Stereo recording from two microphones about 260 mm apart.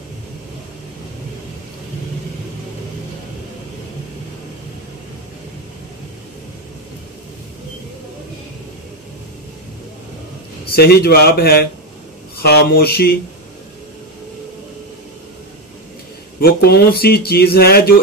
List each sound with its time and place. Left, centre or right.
10.8 s speech: left
16.3 s speech: left